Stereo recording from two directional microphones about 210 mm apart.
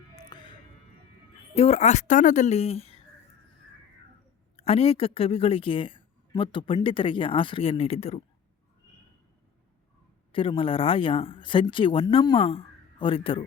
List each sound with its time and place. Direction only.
0.3 s music: 20° left (ahead or behind)
1.5 s speech: 30° left (ahead or behind)
4.5 s speech: 30° left (ahead or behind)
10.3 s speech: 25° left (ahead or behind)